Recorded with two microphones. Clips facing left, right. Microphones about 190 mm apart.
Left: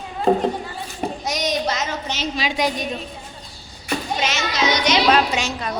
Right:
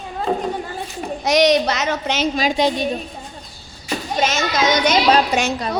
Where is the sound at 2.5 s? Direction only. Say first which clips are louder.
Right 4 dB; 30° right (ahead or behind).